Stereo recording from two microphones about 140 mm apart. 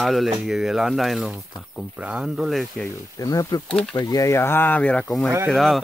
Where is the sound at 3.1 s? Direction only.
25° left (ahead or behind).